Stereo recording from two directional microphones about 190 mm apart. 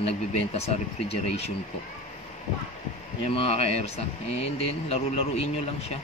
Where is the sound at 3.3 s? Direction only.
30° left (ahead or behind).